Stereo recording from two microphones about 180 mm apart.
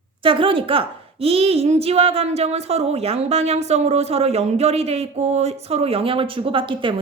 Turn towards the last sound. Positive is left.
turn(degrees=-30)  # may be behind; listen again after turning